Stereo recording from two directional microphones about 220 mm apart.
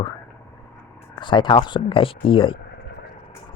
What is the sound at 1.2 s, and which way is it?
Speech, 20° left (ahead or behind).